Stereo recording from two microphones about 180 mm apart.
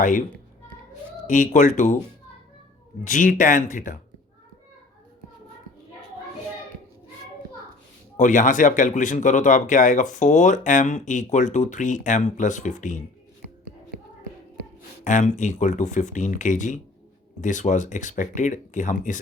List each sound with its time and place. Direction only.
0.0 s speech: 45° left (ahead or behind)
1.3 s speech: 45° left (ahead or behind)
3.0 s speech: 45° left (ahead or behind)
8.1 s speech: 45° left (ahead or behind)
15.0 s speech: 45° left (ahead or behind)